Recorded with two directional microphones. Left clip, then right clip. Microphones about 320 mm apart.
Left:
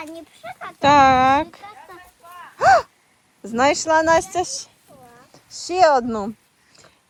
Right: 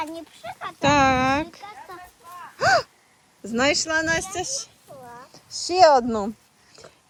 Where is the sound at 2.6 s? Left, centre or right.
Centre.